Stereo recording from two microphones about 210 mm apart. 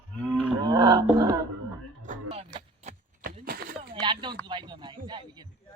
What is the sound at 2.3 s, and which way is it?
Vehicle, 25° right (ahead or behind).